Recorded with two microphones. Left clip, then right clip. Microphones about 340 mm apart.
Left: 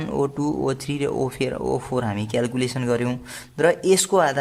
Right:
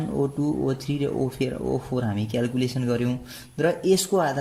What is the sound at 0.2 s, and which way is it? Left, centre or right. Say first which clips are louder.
A man's voice: left 2 dB; left.